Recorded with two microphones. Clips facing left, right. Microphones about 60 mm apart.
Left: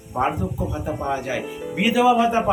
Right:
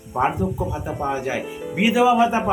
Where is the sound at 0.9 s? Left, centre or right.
Centre.